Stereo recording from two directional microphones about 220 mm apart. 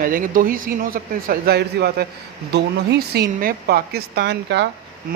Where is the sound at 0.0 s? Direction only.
40° right (ahead or behind).